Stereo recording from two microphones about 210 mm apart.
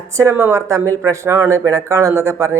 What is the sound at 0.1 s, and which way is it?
Speech, 15° right (ahead or behind).